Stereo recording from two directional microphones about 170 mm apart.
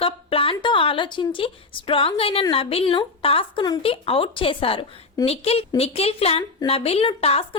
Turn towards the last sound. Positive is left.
turn(degrees=35)  # may be behind; listen again after turning